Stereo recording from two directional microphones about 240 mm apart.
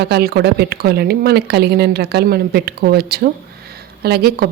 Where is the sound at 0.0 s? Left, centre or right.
Right.